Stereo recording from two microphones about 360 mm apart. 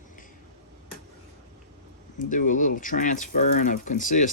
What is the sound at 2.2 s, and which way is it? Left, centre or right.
Speech, left.